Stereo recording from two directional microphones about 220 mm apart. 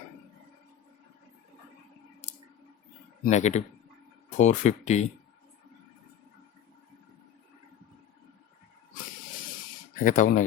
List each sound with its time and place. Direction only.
2.2 s a sound: 30° left (ahead or behind)
3.2 s speech: 30° left (ahead or behind)
9.9 s speech: 35° left (ahead or behind)